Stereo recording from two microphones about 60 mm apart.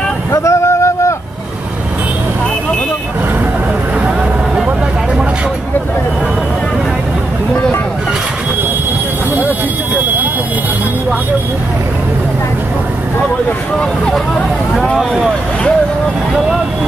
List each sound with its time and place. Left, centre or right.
0.3 s vehicle: left